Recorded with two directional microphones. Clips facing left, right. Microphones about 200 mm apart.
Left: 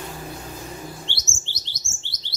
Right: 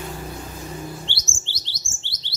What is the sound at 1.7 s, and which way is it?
Chirp, 30° right (ahead or behind).